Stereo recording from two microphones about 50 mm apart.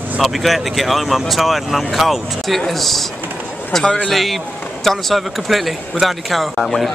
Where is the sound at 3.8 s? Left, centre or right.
Left.